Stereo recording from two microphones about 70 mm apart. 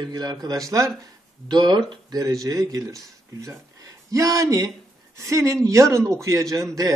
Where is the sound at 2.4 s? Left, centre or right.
Right.